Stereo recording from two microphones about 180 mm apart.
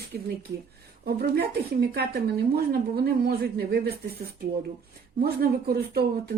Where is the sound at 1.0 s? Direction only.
60° right (ahead or behind).